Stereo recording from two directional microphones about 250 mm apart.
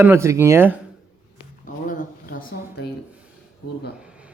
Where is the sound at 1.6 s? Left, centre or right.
Left.